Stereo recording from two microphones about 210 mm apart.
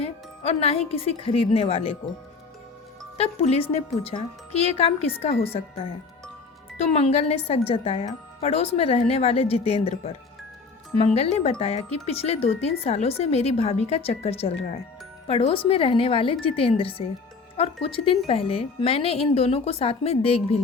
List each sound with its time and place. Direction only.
0.0 s speech: 30° left (ahead or behind)
3.2 s speech: 30° left (ahead or behind)